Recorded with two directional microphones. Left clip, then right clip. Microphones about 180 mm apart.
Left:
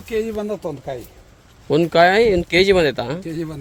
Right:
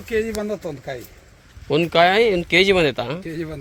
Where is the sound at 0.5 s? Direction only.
20° left (ahead or behind).